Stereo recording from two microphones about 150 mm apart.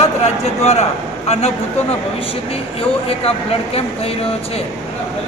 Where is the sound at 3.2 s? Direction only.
40° left (ahead or behind).